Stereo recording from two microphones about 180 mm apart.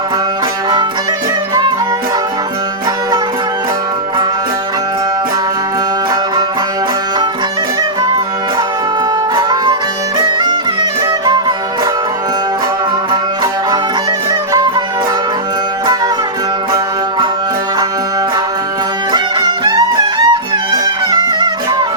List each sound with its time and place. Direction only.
9.3 s music: 20° right (ahead or behind)
19.1 s music: 25° right (ahead or behind)